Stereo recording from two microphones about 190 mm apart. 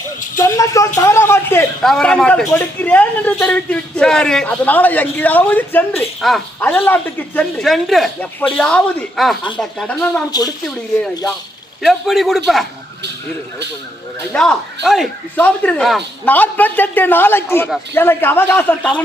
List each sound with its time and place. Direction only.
0.3 s a man's voice: 15° left (ahead or behind)
0.9 s a sound: 15° left (ahead or behind)
1.8 s a man's voice: 5° left (ahead or behind)
11.8 s speech: centre (ahead or behind)
14.3 s a man's voice: centre (ahead or behind)